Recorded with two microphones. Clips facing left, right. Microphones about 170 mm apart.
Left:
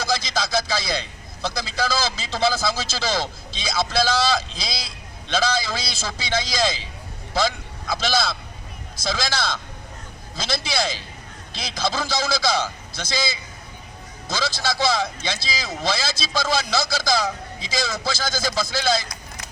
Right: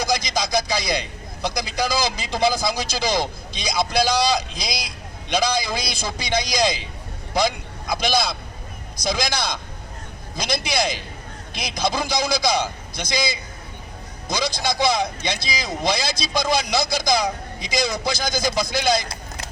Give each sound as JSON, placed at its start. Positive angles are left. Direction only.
{"t": 0.0, "sound": "a man's voice", "side_deg": -15}